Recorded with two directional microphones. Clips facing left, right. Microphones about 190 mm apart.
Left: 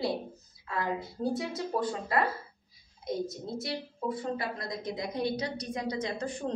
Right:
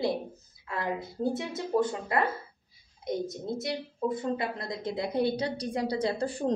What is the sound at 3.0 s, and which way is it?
A woman's voice, 20° right (ahead or behind).